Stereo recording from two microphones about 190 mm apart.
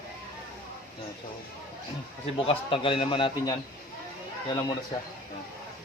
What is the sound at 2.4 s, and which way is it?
A man's voice, 30° left (ahead or behind).